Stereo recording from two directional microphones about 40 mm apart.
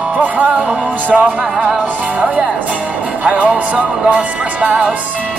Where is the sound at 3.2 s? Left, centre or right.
Right.